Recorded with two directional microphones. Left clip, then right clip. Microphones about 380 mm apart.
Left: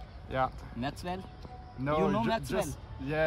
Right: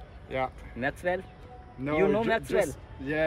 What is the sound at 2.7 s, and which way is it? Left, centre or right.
Speech, centre.